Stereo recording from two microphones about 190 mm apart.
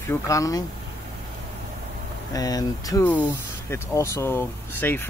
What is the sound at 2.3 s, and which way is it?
Speech, 20° left (ahead or behind).